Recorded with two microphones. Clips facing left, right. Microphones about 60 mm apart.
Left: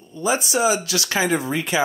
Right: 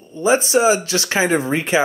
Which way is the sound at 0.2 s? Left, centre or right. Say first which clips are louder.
Right 5 dB; right.